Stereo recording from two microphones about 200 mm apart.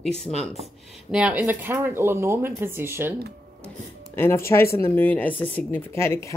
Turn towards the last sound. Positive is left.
turn(degrees=15)  # may be behind; listen again after turning